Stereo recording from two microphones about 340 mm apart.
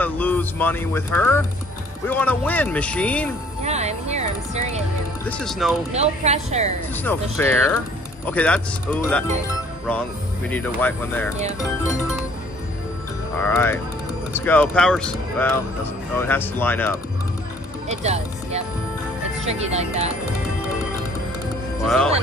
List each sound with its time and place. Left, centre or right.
0.0 s speech: centre
3.6 s speech: centre
5.4 s speech: centre
5.9 s speech: centre
7.0 s speech: centre
10.5 s speech: centre
13.4 s speech: centre
17.8 s speech: centre
21.8 s speech: centre